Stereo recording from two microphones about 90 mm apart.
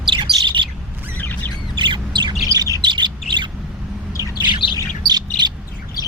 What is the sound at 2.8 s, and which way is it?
Bird, 60° right (ahead or behind).